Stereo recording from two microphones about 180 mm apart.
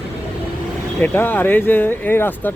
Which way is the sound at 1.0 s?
10° left (ahead or behind).